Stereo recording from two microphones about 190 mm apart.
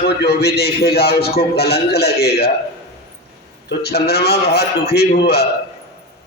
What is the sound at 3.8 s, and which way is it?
A man's voice, 60° left (ahead or behind).